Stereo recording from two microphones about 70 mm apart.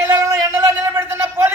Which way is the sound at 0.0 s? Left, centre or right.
Right.